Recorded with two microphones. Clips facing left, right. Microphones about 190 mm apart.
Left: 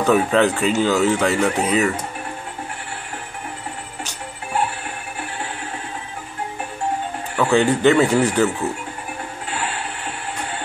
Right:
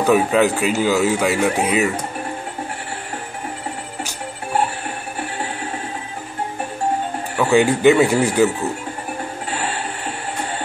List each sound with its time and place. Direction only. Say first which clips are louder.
0.0 s speech: right 1 dB; 5° right (ahead or behind)
7.3 s speech: right 1 dB; 10° right (ahead or behind)